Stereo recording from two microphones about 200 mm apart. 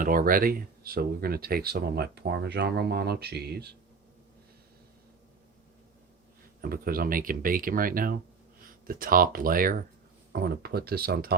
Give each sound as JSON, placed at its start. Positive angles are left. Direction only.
{"t": 0.0, "sound": "speech", "side_deg": -45}
{"t": 6.6, "sound": "speech", "side_deg": -45}